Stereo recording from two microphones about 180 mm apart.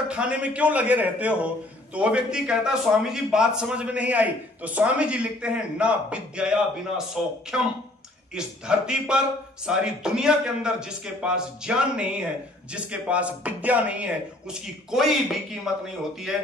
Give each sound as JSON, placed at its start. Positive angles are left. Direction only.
{"t": 0.1, "sound": "a man's voice", "side_deg": -5}